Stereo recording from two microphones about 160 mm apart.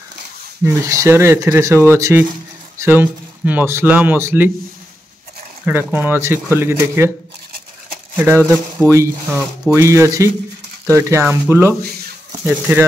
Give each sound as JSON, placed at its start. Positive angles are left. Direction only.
{"t": 0.7, "sound": "speech", "side_deg": -20}
{"t": 5.7, "sound": "speech", "side_deg": -10}
{"t": 8.2, "sound": "speech", "side_deg": -15}